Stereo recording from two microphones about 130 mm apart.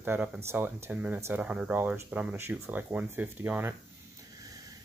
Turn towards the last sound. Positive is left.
turn(degrees=-15)  # may be behind; listen again after turning